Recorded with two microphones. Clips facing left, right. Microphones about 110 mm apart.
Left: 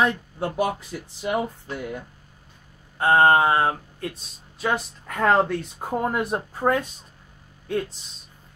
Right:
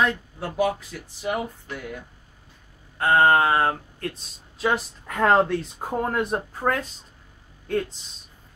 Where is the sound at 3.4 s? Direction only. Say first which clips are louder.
Left 1 dB; 10° left (ahead or behind).